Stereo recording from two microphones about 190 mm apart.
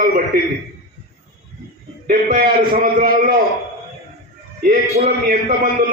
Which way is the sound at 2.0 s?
45° right (ahead or behind).